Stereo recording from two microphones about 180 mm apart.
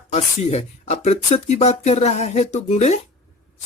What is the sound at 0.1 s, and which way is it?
Speech, 40° left (ahead or behind).